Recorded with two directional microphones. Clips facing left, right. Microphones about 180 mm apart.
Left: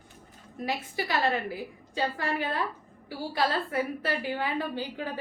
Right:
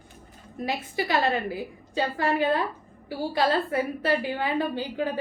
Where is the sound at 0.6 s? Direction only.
20° right (ahead or behind).